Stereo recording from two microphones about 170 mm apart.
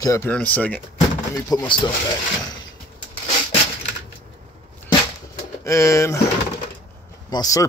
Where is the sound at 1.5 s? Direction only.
25° left (ahead or behind).